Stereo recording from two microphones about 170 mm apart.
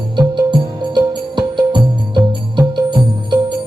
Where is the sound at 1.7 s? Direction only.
25° right (ahead or behind).